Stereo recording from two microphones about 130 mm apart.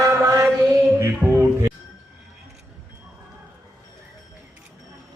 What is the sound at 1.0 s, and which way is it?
Music, 20° right (ahead or behind).